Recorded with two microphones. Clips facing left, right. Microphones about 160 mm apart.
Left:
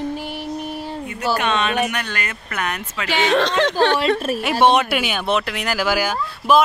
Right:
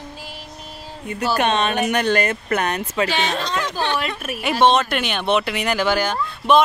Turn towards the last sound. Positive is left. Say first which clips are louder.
# even
turn(degrees=5)  # may be behind; listen again after turning